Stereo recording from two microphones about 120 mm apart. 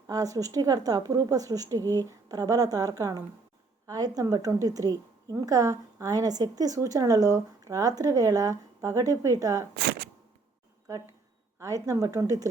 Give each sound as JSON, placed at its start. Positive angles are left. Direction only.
{"t": 0.1, "sound": "a woman's voice", "side_deg": -30}
{"t": 11.6, "sound": "a woman's voice", "side_deg": -25}